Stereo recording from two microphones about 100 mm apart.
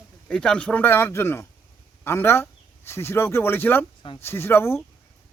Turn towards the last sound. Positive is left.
turn(degrees=25)  # may be behind; listen again after turning